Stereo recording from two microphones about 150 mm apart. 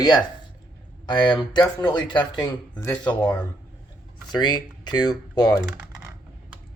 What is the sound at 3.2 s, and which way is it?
Speech, 10° left (ahead or behind).